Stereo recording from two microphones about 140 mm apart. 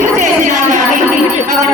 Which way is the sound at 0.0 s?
65° right (ahead or behind).